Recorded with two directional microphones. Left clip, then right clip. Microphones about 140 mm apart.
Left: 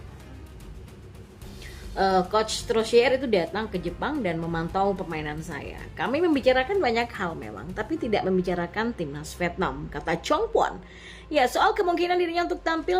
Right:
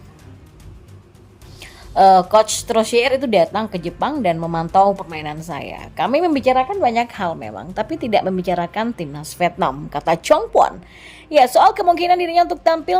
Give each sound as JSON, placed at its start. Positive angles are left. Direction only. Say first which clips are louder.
{"t": 2.0, "sound": "a woman's voice", "louder": "right 12 dB", "side_deg": -50}